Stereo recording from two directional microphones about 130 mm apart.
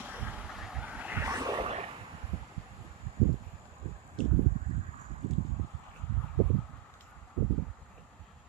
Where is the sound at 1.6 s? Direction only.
55° right (ahead or behind).